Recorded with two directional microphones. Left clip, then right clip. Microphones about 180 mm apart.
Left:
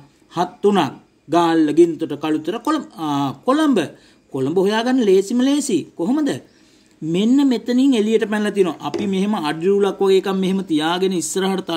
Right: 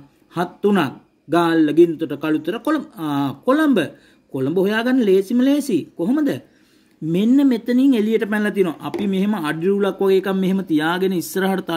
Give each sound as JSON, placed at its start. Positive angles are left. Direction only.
{"t": 0.3, "sound": "speech", "side_deg": -35}